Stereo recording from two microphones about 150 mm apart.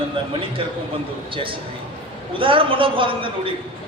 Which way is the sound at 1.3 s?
35° right (ahead or behind).